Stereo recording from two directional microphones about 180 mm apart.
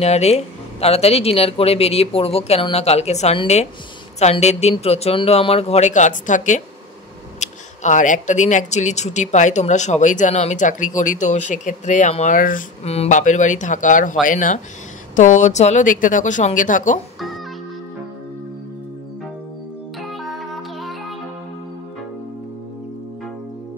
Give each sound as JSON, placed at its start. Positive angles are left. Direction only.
{"t": 0.0, "sound": "speech", "side_deg": 35}
{"t": 12.8, "sound": "speech", "side_deg": 35}
{"t": 20.0, "sound": "music", "side_deg": 0}